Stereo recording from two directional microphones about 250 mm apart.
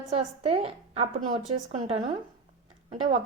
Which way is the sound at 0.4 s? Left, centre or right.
Right.